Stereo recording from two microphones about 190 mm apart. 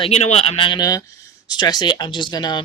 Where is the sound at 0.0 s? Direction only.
35° left (ahead or behind).